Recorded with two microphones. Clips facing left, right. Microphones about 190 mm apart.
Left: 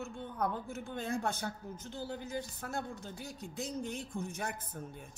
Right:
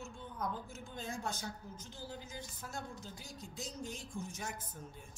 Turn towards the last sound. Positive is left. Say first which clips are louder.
# left 5 dB
turn(degrees=60)  # may be behind; listen again after turning